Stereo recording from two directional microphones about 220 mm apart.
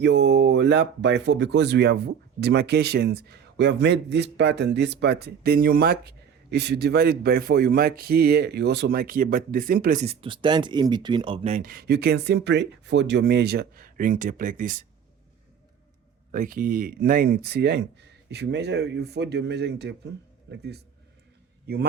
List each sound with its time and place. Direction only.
0.0 s speech: 50° right (ahead or behind)
16.3 s speech: 40° right (ahead or behind)